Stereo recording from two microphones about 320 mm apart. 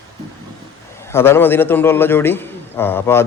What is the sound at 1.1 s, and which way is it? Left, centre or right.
A man's voice, centre.